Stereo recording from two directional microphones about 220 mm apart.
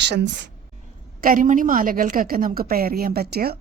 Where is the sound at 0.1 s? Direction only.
50° right (ahead or behind).